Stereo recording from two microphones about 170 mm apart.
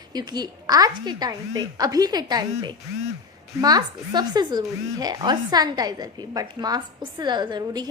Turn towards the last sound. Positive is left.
turn(degrees=-25)  # may be behind; listen again after turning